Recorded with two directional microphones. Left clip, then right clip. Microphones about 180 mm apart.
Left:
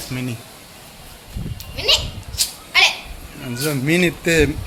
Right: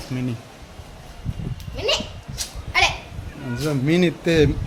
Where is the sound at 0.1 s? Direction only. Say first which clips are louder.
Even; 10° right (ahead or behind).